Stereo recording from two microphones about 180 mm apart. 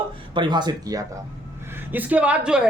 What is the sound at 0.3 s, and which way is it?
Speech, 25° right (ahead or behind).